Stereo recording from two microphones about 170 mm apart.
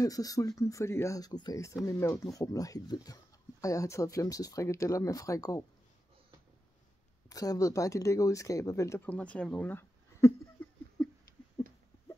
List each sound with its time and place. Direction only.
0.0 s speech: 20° left (ahead or behind)
7.2 s speech: 20° left (ahead or behind)